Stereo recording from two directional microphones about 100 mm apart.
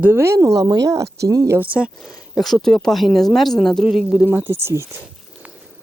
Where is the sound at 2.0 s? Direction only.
Centre (ahead or behind); by 4.9 s 25° right (ahead or behind).